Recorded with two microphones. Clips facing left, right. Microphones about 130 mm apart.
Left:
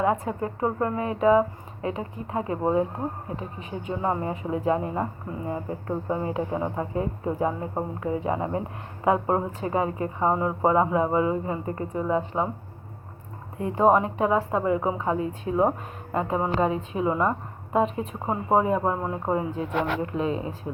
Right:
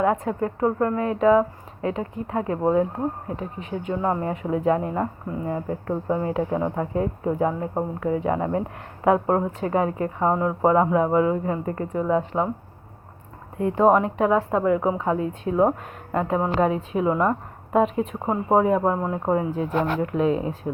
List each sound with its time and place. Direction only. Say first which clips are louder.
0.0 s speech: right 3 dB; 5° left (ahead or behind)
3.6 s a woman's voice: right 3 dB; 5° left (ahead or behind)
13.6 s a woman's voice: right 2 dB; 5° left (ahead or behind)
19.6 s speech: right 3 dB; 40° right (ahead or behind)
20.1 s a woman's voice: right 5 dB; centre (ahead or behind)